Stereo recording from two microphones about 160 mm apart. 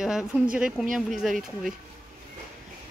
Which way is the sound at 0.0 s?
5° right (ahead or behind).